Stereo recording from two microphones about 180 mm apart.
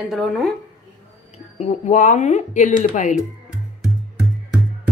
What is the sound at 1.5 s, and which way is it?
Speech, 40° left (ahead or behind).